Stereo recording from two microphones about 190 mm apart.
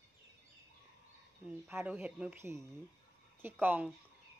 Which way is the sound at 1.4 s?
10° right (ahead or behind).